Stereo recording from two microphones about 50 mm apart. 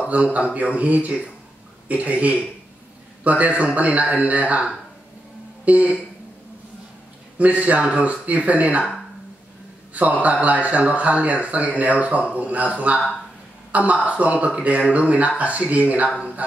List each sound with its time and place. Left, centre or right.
0.0 s speech: right
5.7 s speech: right
7.3 s speech: right
10.2 s speech: right